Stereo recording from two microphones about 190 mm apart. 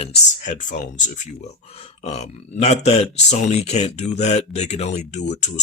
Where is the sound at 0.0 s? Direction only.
40° left (ahead or behind).